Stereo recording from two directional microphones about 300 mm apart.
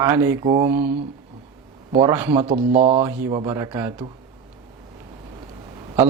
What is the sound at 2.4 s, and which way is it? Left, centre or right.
A man's voice, right.